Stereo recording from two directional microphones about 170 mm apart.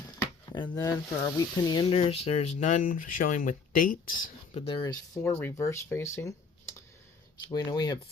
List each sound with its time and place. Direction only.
0.7 s speech: 20° left (ahead or behind); by 3.9 s 55° left (ahead or behind)
4.5 s speech: 30° left (ahead or behind)
7.5 s speech: 25° left (ahead or behind)